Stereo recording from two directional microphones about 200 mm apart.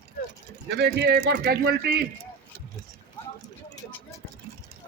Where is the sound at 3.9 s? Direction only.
10° left (ahead or behind).